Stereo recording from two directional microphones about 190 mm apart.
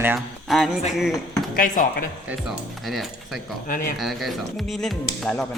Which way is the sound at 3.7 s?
45° left (ahead or behind).